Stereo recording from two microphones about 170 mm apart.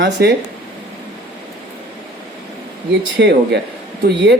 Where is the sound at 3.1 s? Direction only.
85° right.